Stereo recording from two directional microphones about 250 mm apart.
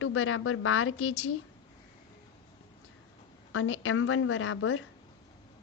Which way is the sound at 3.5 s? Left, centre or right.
Left.